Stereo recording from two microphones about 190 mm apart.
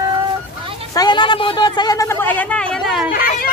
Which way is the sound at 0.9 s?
25° left (ahead or behind).